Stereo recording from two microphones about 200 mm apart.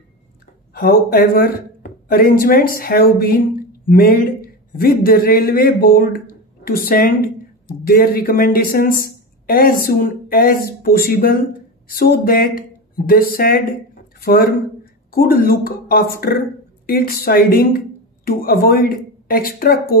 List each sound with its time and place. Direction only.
0.7 s a man's voice: 50° left (ahead or behind)
15.0 s speech: 50° left (ahead or behind)